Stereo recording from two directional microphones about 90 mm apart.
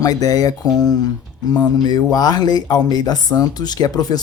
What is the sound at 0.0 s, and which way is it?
Speech, 45° left (ahead or behind).